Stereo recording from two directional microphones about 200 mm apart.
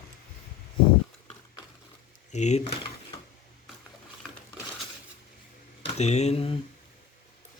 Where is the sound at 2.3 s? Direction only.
35° left (ahead or behind).